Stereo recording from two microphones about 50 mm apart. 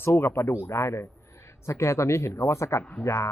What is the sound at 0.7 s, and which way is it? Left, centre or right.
Speech, left.